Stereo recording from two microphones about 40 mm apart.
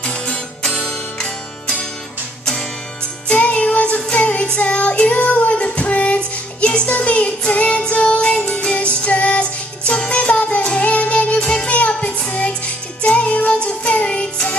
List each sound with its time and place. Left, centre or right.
0.0 s music: left
3.3 s music: left